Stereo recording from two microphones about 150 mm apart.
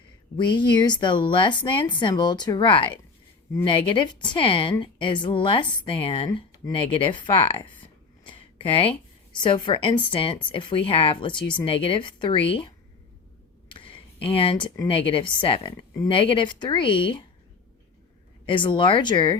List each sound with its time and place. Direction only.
0.3 s speech: 30° left (ahead or behind)
13.7 s a sound: 35° left (ahead or behind)
14.8 s speech: 35° left (ahead or behind)
18.4 s speech: 35° left (ahead or behind)